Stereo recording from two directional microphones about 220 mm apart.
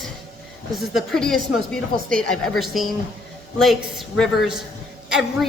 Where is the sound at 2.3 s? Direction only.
Centre (ahead or behind).